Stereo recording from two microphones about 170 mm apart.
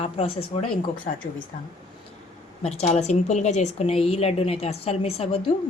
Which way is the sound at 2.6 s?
40° left (ahead or behind).